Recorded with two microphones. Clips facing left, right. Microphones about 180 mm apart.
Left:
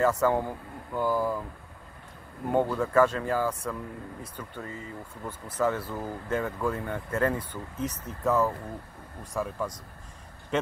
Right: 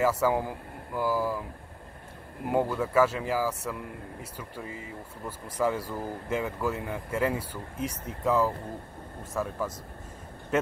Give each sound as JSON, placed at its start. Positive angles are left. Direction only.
{"t": 0.0, "sound": "speech", "side_deg": -5}
{"t": 2.5, "sound": "speech", "side_deg": -10}
{"t": 10.5, "sound": "a sound", "side_deg": -5}